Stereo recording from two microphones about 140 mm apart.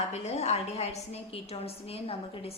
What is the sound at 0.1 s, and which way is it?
A woman's voice, 50° left (ahead or behind).